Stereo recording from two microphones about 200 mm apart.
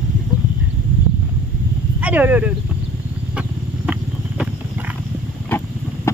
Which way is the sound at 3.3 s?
5° right (ahead or behind).